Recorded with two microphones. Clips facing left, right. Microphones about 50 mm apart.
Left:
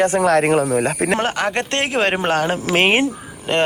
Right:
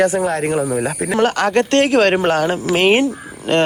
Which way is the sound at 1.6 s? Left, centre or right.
Left.